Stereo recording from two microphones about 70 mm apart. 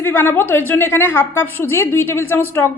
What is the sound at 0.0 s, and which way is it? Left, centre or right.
A woman's voice, left.